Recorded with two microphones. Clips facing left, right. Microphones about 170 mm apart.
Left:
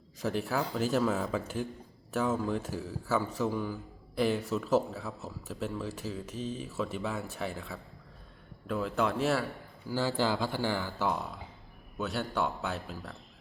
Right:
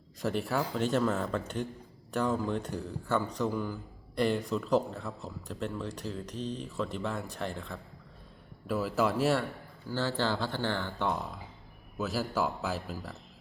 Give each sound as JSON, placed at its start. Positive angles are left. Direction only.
{"t": 0.2, "sound": "a man's voice", "side_deg": 0}
{"t": 9.9, "sound": "a man's voice", "side_deg": 10}